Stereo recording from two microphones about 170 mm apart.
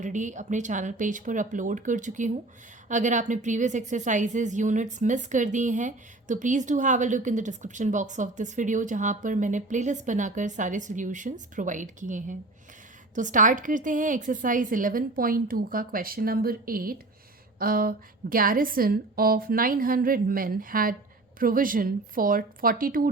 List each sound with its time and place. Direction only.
0.0 s a woman's voice: 45° right (ahead or behind)